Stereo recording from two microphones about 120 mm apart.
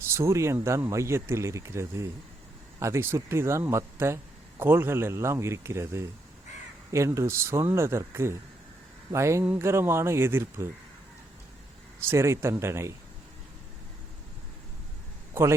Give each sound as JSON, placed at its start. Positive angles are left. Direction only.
{"t": 0.1, "sound": "speech", "side_deg": -25}
{"t": 12.0, "sound": "speech", "side_deg": -25}